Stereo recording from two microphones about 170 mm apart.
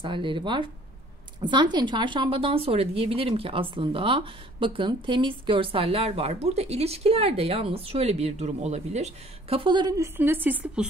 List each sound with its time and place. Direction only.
0.0 s a woman's voice: 30° right (ahead or behind); by 10.9 s 10° right (ahead or behind)